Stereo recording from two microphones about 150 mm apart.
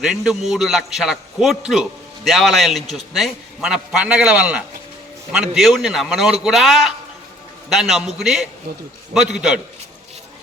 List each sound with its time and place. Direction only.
0.0 s a man's voice: 5° right (ahead or behind)